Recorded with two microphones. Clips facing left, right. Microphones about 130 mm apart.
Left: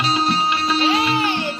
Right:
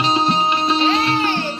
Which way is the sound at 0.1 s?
25° right (ahead or behind).